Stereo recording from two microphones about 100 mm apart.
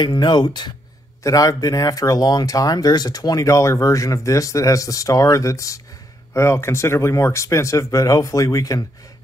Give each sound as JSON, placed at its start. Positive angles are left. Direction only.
{"t": 0.0, "sound": "speech", "side_deg": 45}
{"t": 1.2, "sound": "speech", "side_deg": 35}